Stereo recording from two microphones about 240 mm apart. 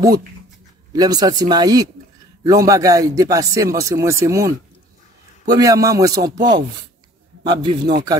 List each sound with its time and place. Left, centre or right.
0.9 s speech: centre
5.5 s speech: centre
7.4 s speech: centre